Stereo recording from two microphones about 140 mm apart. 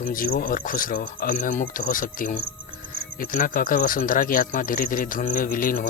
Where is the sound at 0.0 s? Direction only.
90° left.